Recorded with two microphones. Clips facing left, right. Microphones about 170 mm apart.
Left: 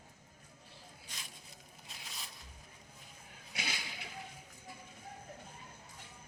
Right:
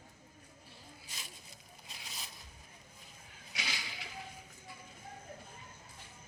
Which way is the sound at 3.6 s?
55° left (ahead or behind).